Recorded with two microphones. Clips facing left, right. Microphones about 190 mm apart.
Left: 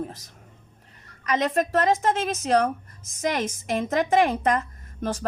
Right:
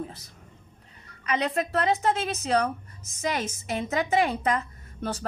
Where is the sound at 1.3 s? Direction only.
45° left (ahead or behind).